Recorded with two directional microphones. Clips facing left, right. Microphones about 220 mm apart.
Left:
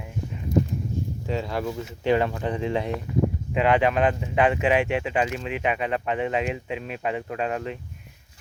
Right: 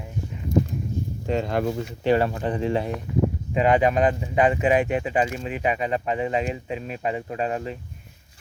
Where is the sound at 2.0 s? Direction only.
40° right (ahead or behind).